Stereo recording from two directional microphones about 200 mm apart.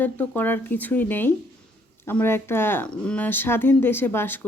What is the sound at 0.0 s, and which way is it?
Speech, 10° left (ahead or behind).